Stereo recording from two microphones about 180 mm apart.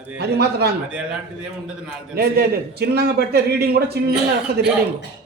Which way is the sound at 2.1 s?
60° right (ahead or behind).